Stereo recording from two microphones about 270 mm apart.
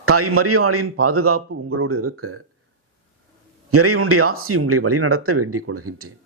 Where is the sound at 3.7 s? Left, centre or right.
Right.